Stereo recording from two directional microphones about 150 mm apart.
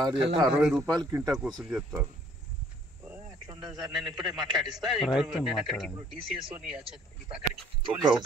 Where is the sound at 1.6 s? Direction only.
5° right (ahead or behind).